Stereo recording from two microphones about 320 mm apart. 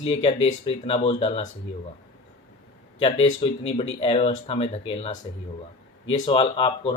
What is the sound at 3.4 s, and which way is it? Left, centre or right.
Speech, centre.